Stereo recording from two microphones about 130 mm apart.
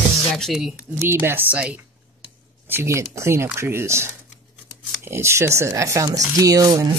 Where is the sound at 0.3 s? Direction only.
Centre (ahead or behind).